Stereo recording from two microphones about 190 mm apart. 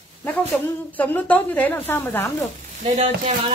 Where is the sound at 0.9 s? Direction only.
10° left (ahead or behind).